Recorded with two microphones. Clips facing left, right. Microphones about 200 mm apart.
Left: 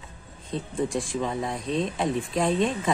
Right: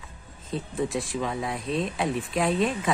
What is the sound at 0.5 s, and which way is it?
Speech, 5° right (ahead or behind).